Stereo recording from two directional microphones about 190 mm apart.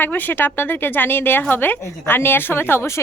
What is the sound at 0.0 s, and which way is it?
A woman's voice, 10° left (ahead or behind).